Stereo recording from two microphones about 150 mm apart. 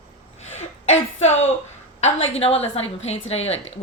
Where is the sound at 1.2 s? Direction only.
45° left (ahead or behind).